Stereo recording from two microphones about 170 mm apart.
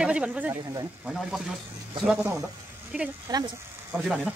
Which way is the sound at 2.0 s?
5° right (ahead or behind).